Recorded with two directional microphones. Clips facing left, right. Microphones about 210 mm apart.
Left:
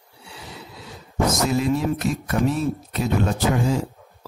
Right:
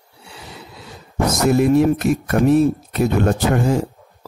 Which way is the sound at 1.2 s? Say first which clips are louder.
Right 5 dB; 60° right (ahead or behind).